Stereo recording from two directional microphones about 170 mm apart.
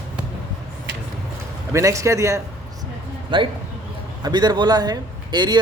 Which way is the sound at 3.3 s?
30° right (ahead or behind).